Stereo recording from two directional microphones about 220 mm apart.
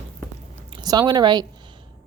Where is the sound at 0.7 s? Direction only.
15° right (ahead or behind).